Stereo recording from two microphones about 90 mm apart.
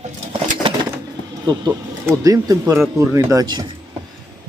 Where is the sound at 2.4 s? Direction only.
35° right (ahead or behind).